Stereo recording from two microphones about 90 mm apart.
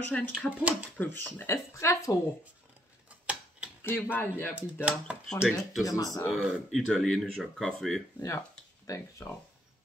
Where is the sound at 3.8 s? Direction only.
20° left (ahead or behind).